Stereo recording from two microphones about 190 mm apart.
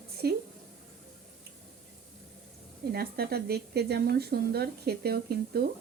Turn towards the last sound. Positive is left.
turn(degrees=-55)  # may be behind; listen again after turning